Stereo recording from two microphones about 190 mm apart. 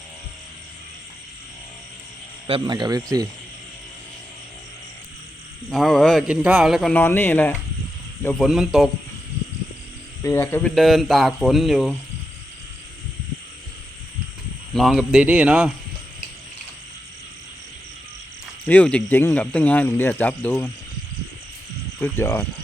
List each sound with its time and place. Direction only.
2.5 s speech: 20° right (ahead or behind)
5.6 s speech: centre (ahead or behind)
6.9 s speech: 10° left (ahead or behind)
8.4 s speech: centre (ahead or behind)
10.2 s speech: 10° left (ahead or behind)
14.7 s speech: centre (ahead or behind)
18.6 s speech: 10° left (ahead or behind)
22.0 s speech: 15° left (ahead or behind)